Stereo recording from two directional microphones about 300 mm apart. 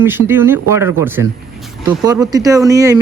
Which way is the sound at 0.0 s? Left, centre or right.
Centre.